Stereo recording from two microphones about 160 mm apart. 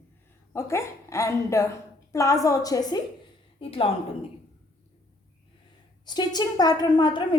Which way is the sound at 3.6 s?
35° left (ahead or behind).